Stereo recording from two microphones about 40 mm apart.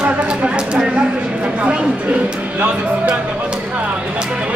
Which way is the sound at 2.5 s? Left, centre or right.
Right.